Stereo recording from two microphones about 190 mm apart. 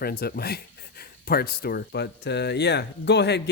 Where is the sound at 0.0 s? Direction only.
55° left (ahead or behind).